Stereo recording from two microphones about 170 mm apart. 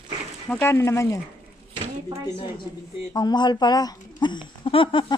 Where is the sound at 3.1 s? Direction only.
25° left (ahead or behind).